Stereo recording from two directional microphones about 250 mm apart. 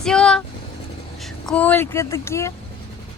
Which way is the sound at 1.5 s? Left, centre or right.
Centre.